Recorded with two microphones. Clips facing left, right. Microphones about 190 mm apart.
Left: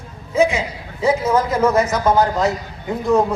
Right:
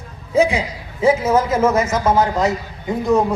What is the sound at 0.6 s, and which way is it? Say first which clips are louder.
A man's voice: right 1 dB; 25° right (ahead or behind).